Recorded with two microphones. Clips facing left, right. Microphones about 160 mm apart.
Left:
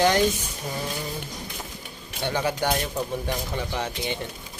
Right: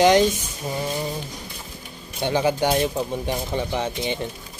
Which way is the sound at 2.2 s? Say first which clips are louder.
Right 5 dB; 20° right (ahead or behind).